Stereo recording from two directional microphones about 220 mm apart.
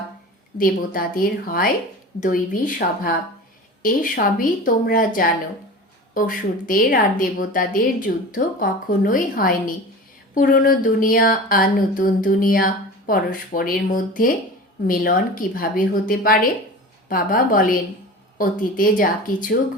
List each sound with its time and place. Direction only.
0.6 s speech: 40° left (ahead or behind)